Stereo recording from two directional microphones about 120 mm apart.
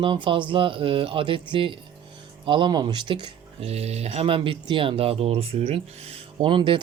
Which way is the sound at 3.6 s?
60° right (ahead or behind).